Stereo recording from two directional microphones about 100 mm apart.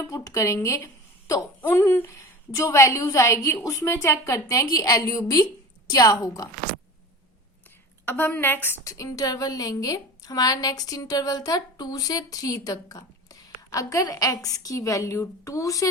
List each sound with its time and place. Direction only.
0.0 s a woman's voice: 35° left (ahead or behind)
8.0 s a woman's voice: 20° left (ahead or behind); by 15.9 s 35° left (ahead or behind)